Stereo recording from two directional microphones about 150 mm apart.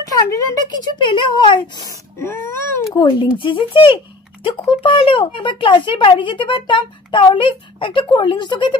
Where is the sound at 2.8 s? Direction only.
25° left (ahead or behind).